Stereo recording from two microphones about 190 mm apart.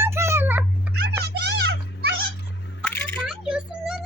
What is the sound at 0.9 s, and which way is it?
Music, 60° right (ahead or behind).